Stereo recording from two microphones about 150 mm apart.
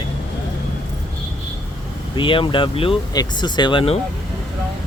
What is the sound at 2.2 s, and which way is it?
Speech, 35° left (ahead or behind).